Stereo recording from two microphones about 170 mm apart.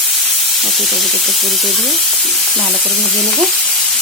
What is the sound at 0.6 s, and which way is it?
A woman's voice, centre (ahead or behind).